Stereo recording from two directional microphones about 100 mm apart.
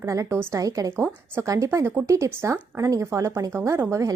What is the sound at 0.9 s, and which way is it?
A woman's voice, 25° right (ahead or behind).